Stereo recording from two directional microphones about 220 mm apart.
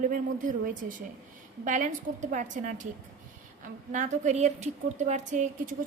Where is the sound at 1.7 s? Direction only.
35° right (ahead or behind).